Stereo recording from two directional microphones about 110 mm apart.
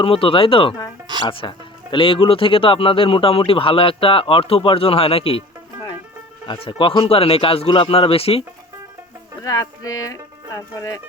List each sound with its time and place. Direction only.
0.0 s speech: 55° left (ahead or behind)
6.5 s speech: 50° left (ahead or behind)
9.4 s speech: 35° left (ahead or behind)